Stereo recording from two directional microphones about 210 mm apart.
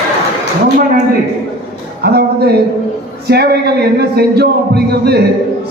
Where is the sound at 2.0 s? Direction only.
50° right (ahead or behind).